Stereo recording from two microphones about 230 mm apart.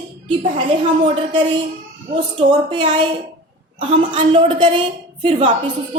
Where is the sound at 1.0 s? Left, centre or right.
Right.